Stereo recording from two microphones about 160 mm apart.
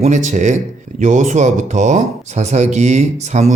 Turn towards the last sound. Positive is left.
turn(degrees=-45)  # may be behind; listen again after turning